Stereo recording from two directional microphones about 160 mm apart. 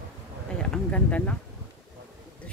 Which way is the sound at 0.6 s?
5° left (ahead or behind).